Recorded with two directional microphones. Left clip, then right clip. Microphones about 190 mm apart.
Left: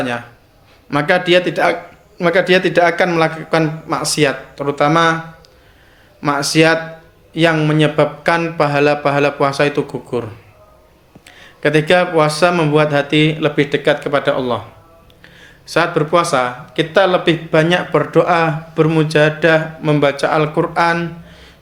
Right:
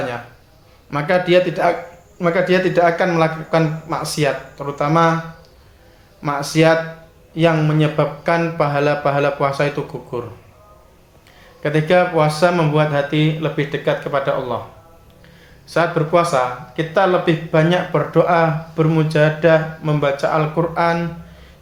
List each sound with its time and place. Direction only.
0.9 s a man's voice: 25° left (ahead or behind)
6.2 s speech: 25° left (ahead or behind)
11.3 s speech: 30° left (ahead or behind)